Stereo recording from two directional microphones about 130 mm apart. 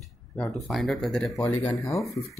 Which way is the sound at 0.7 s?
5° left (ahead or behind).